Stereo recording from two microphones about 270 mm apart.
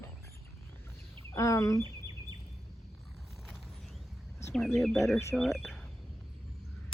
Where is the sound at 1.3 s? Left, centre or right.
Centre.